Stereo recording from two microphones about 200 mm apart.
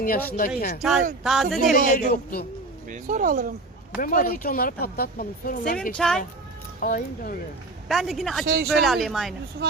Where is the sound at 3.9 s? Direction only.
45° left (ahead or behind).